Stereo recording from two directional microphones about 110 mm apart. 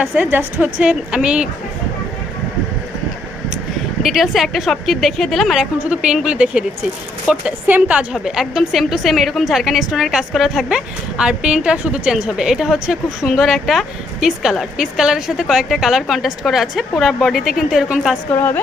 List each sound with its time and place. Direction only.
0.0 s a woman's voice: 15° right (ahead or behind)
4.0 s a woman's voice: centre (ahead or behind)
18.3 s a woman's voice: 20° left (ahead or behind)